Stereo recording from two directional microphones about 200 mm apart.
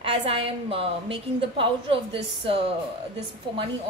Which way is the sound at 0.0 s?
30° right (ahead or behind).